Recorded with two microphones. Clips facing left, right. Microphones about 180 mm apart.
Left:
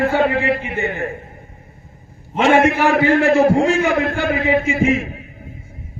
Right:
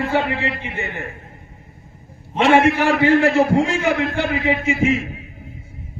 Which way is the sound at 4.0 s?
50° left (ahead or behind).